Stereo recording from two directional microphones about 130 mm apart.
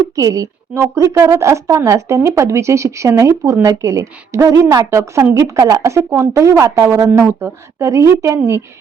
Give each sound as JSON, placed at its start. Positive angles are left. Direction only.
{"t": 0.2, "sound": "a woman's voice", "side_deg": -25}